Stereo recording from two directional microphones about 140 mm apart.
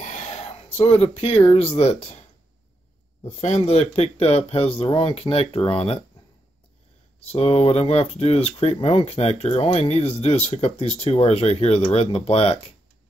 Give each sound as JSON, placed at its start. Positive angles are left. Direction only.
{"t": 0.0, "sound": "a sound", "side_deg": 60}
{"t": 0.7, "sound": "speech", "side_deg": 45}
{"t": 3.3, "sound": "speech", "side_deg": 50}
{"t": 7.2, "sound": "speech", "side_deg": 45}